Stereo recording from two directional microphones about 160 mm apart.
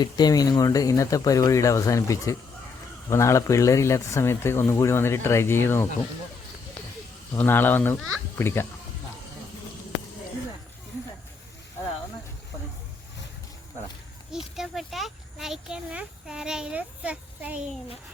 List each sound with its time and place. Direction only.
0.0 s speech: 25° left (ahead or behind)
7.3 s speech: 15° left (ahead or behind)
14.5 s speech: centre (ahead or behind)